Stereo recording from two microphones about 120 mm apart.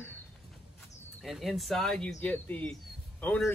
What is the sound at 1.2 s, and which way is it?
Speech, centre (ahead or behind).